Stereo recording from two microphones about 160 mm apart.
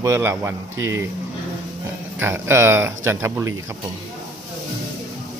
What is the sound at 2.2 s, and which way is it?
Speech, 15° right (ahead or behind).